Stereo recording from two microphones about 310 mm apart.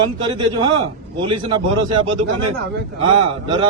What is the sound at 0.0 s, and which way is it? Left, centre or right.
A man's voice, centre.